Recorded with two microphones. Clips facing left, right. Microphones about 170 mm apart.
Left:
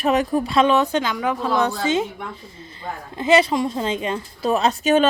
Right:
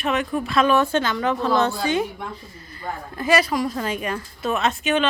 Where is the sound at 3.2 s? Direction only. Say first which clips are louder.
Left 3 dB; 25° left (ahead or behind); by 5.1 s 40° left (ahead or behind).